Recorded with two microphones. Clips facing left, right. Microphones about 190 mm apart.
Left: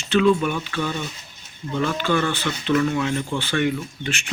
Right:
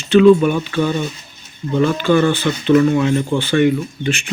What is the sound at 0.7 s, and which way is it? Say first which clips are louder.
Speech: right 8 dB; 25° right (ahead or behind).